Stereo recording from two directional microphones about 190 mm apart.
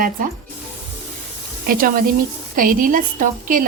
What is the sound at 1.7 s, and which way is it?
A woman's voice, 50° right (ahead or behind).